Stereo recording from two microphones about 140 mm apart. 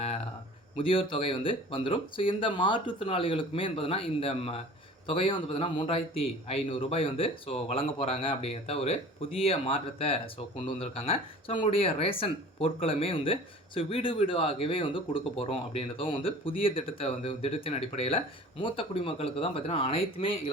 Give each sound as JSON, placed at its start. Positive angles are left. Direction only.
{"t": 0.8, "sound": "a man's voice", "side_deg": 40}